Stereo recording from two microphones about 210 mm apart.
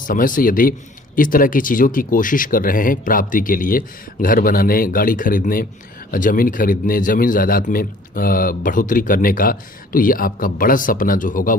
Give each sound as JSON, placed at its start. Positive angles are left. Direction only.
{"t": 0.0, "sound": "speech", "side_deg": 40}